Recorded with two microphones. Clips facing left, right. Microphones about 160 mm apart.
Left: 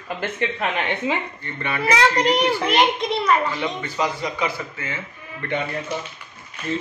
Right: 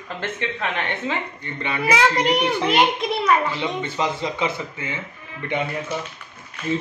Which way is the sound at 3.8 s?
25° right (ahead or behind).